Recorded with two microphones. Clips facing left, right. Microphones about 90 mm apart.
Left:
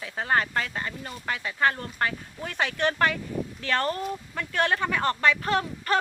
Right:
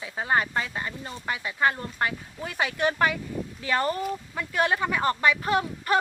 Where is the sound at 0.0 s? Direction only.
10° right (ahead or behind).